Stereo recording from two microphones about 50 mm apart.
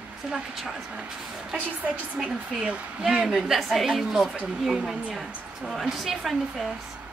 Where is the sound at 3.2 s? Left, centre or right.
Centre.